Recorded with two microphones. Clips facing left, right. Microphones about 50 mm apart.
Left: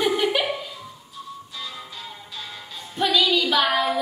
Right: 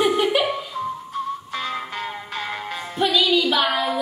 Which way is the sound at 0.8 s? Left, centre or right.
Right.